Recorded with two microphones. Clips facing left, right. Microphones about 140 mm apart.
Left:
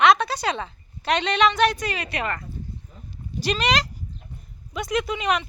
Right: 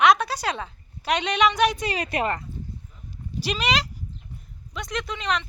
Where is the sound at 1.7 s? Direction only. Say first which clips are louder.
Right 2 dB; 35° right (ahead or behind).